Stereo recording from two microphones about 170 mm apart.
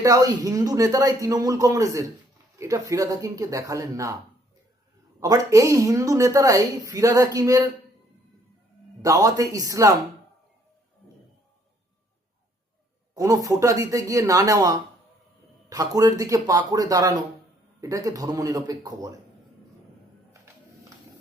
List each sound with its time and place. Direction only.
0.0 s a woman's voice: 20° right (ahead or behind)
5.2 s a woman's voice: 20° right (ahead or behind)
9.0 s a woman's voice: 20° right (ahead or behind)
13.1 s a woman's voice: 20° right (ahead or behind)